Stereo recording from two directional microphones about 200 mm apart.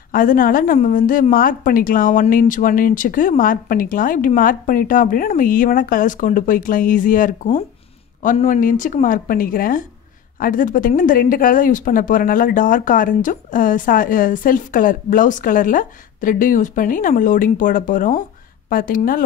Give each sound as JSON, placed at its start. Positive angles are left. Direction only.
{"t": 0.1, "sound": "speech", "side_deg": 45}